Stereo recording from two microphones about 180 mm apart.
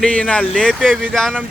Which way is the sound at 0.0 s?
5° left (ahead or behind).